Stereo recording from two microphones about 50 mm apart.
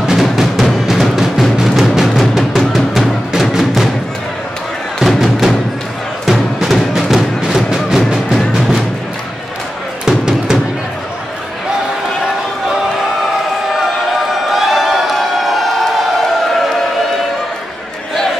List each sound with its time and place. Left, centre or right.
0.0 s music: centre
4.9 s music: centre
10.0 s music: centre
13.7 s a sound: centre